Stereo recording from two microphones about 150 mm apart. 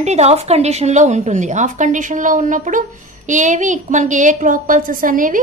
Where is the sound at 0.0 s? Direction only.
45° right (ahead or behind).